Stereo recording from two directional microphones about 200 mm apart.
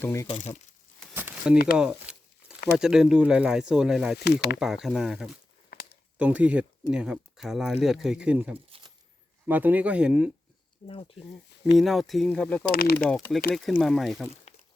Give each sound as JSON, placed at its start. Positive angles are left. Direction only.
{"t": 0.0, "sound": "speech", "side_deg": 15}
{"t": 0.3, "sound": "speech", "side_deg": 35}
{"t": 1.1, "sound": "a sound", "side_deg": -10}
{"t": 2.7, "sound": "speech", "side_deg": -5}
{"t": 4.2, "sound": "speech", "side_deg": 55}
{"t": 4.6, "sound": "speech", "side_deg": 0}
{"t": 10.8, "sound": "speech", "side_deg": 25}
{"t": 11.6, "sound": "speech", "side_deg": 0}
{"t": 12.7, "sound": "speech", "side_deg": 50}
{"t": 13.1, "sound": "speech", "side_deg": 5}